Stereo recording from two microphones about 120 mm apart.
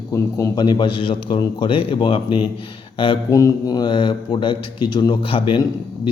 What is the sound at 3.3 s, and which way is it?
A man's voice, 30° left (ahead or behind).